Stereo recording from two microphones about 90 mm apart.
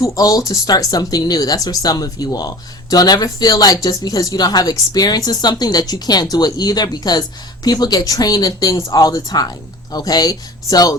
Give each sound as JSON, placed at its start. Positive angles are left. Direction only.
{"t": 0.0, "sound": "speech", "side_deg": 40}